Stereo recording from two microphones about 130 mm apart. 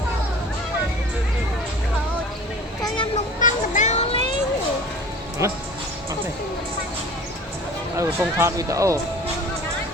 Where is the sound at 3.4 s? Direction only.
70° left (ahead or behind).